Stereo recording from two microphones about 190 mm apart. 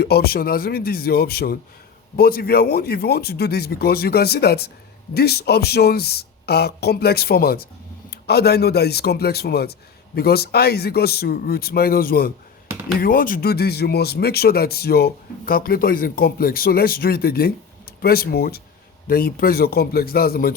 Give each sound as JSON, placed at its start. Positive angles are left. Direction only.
{"t": 0.0, "sound": "speech", "side_deg": 55}